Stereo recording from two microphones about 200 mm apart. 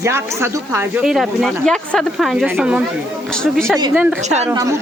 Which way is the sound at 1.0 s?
Centre (ahead or behind).